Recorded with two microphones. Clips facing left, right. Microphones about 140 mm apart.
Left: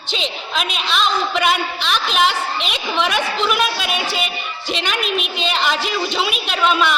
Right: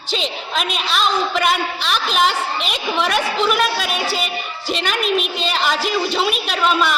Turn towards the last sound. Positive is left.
turn(degrees=0)  # may be behind; listen again after turning